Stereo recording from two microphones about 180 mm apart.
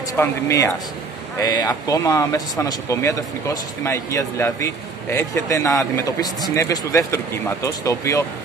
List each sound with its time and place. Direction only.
0.1 s speech: 15° left (ahead or behind)